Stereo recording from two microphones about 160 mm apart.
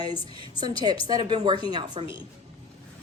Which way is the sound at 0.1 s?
35° left (ahead or behind).